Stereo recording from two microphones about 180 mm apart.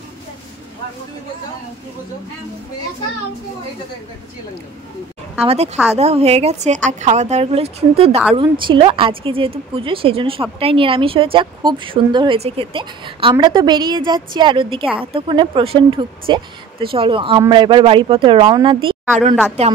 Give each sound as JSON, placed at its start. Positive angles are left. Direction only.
{"t": 5.4, "sound": "speech", "side_deg": -35}